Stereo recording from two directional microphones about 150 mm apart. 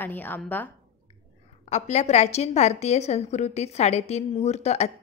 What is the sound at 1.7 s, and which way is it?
A woman's voice, 50° left (ahead or behind).